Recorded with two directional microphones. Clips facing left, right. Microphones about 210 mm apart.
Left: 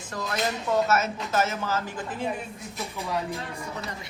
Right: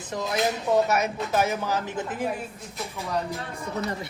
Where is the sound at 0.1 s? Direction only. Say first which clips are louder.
Right 3 dB; 20° right (ahead or behind).